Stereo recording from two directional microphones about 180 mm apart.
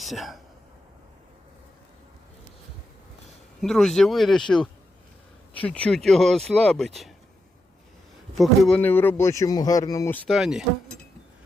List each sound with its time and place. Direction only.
0.0 s speech: centre (ahead or behind)
3.6 s speech: centre (ahead or behind)
8.4 s speech: 5° left (ahead or behind)
10.2 s speech: centre (ahead or behind)